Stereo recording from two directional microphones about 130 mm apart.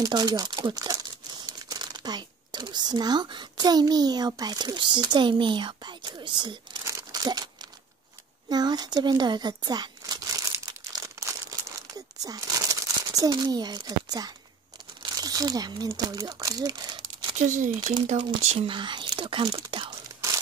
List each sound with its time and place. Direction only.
0.0 s speech: 30° right (ahead or behind)
6.8 s crumpling: 25° right (ahead or behind)
8.5 s a sound: 30° right (ahead or behind)
15.0 s speech: 30° right (ahead or behind)
18.1 s speech: 55° right (ahead or behind)
18.7 s speech: 40° right (ahead or behind)